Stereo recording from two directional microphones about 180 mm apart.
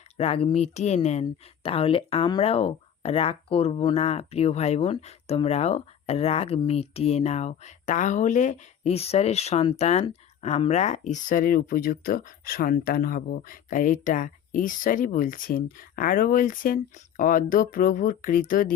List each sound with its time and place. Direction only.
0.2 s speech: 35° left (ahead or behind); by 18.7 s 50° left (ahead or behind)